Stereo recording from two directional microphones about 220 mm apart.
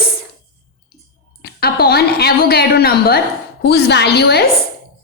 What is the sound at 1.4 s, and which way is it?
A woman's voice, 45° left (ahead or behind).